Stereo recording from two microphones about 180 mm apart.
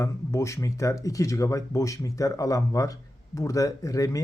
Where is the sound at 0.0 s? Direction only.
15° left (ahead or behind).